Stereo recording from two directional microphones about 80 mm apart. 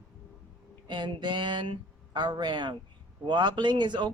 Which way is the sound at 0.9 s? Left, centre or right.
Right.